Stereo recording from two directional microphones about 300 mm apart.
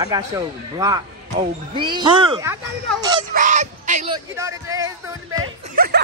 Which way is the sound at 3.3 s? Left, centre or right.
Right.